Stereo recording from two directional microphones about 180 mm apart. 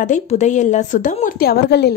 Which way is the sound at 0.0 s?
40° left (ahead or behind).